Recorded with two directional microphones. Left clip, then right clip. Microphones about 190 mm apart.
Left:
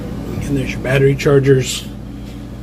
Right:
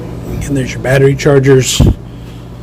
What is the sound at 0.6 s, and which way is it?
Speech, 35° right (ahead or behind).